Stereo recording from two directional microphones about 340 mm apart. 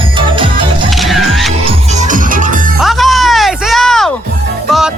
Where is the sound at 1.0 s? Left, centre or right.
Centre.